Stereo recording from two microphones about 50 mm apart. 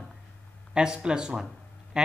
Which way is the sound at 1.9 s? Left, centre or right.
Centre.